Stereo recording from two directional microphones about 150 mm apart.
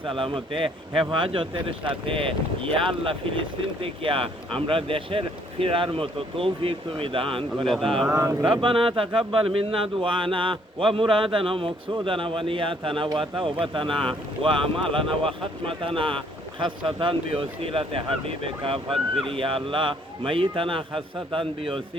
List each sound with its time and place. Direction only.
0.2 s speech: 35° right (ahead or behind)
8.1 s speech: 20° right (ahead or behind)
8.4 s speech: 35° right (ahead or behind)